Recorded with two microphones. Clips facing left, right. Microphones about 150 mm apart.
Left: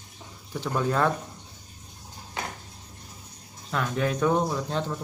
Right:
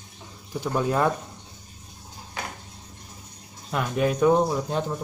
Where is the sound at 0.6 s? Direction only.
15° right (ahead or behind).